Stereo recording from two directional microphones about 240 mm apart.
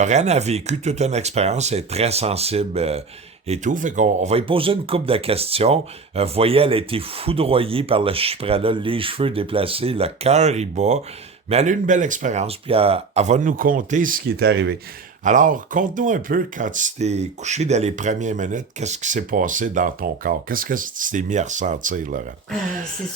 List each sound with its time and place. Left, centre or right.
0.0 s speech: right
15.2 s speech: right